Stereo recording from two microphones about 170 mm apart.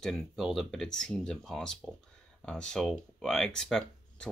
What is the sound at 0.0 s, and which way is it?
Speech, centre (ahead or behind).